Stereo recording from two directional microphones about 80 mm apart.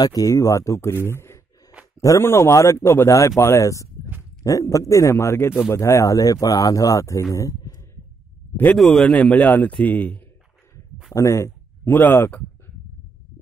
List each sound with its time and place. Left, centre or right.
0.0 s speech: left
8.7 s speech: centre
9.0 s speech: centre
11.1 s speech: left